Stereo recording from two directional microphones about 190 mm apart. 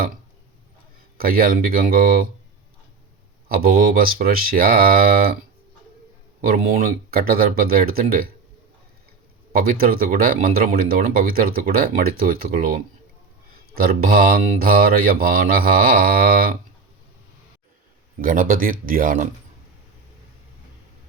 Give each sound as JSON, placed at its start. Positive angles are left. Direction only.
{"t": 1.2, "sound": "speech", "side_deg": -50}
{"t": 3.5, "sound": "speech", "side_deg": -50}
{"t": 6.4, "sound": "speech", "side_deg": -50}
{"t": 9.5, "sound": "speech", "side_deg": -50}
{"t": 18.2, "sound": "speech", "side_deg": -45}